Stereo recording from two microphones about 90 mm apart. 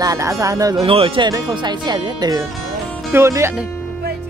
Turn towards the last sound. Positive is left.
turn(degrees=-30)  # may be behind; listen again after turning